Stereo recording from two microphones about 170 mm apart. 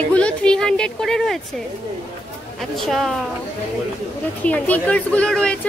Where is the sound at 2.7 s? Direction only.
Centre (ahead or behind).